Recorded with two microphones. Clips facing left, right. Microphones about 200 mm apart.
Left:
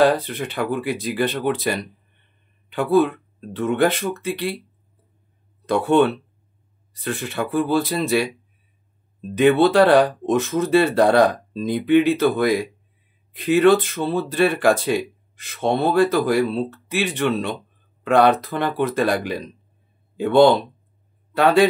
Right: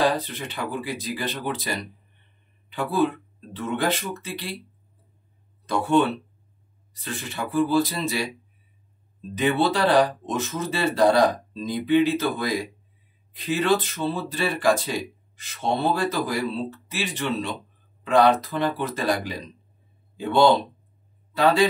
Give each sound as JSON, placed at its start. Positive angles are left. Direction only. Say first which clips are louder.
{"t": 0.0, "sound": "speech", "louder": "left 6 dB", "side_deg": 60}
{"t": 5.7, "sound": "speech", "louder": "left 4 dB", "side_deg": 60}
{"t": 9.3, "sound": "a man's voice", "louder": "left 7 dB", "side_deg": 60}